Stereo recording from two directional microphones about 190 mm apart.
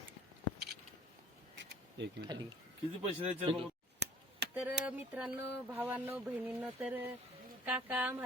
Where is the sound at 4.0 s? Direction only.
60° right (ahead or behind).